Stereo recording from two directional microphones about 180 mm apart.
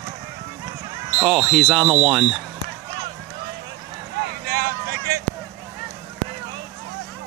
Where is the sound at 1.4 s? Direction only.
Centre (ahead or behind).